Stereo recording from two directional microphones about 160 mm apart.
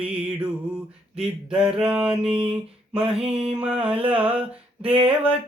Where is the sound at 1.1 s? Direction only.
5° right (ahead or behind).